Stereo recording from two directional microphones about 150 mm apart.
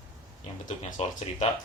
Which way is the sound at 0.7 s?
50° left (ahead or behind).